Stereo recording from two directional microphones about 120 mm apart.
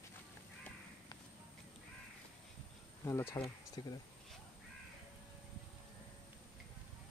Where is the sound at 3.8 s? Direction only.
40° left (ahead or behind).